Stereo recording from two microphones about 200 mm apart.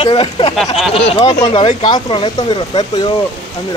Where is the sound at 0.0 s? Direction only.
25° left (ahead or behind).